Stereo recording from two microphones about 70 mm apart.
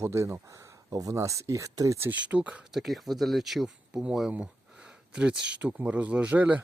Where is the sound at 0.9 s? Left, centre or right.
Right.